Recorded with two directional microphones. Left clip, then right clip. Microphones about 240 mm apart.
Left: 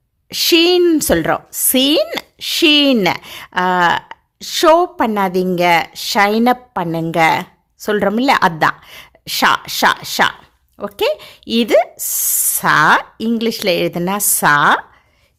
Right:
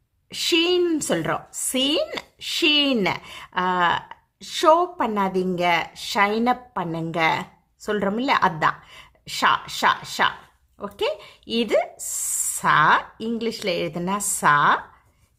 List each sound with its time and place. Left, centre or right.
0.3 s a woman's voice: left